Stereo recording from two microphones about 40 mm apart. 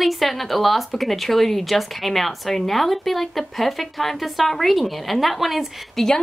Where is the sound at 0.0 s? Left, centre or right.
Centre.